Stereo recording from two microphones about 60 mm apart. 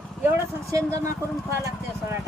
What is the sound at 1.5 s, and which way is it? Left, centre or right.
Speech, right.